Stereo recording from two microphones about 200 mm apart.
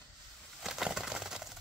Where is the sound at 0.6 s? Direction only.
Centre (ahead or behind).